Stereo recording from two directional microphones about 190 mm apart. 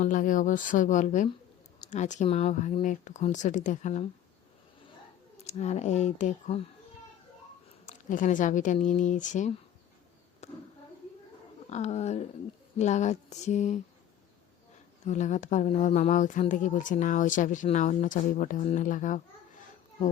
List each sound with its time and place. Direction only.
0.0 s speech: 45° left (ahead or behind)
5.4 s speech: 35° left (ahead or behind)
7.9 s speech: 45° left (ahead or behind)
11.7 s speech: 35° left (ahead or behind)
15.0 s speech: 40° left (ahead or behind)